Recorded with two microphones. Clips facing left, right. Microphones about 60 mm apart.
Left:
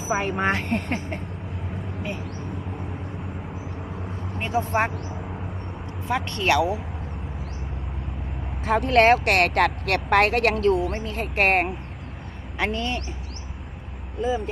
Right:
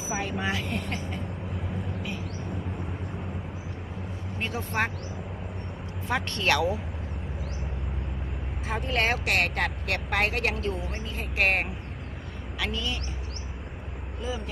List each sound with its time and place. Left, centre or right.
0.0 s speech: left
4.4 s speech: centre
6.1 s speech: centre
8.6 s a woman's voice: left
14.2 s speech: left